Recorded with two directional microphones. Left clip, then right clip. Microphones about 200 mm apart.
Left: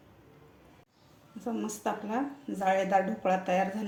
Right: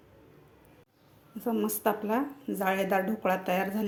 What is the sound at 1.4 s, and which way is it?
Speech, 35° right (ahead or behind).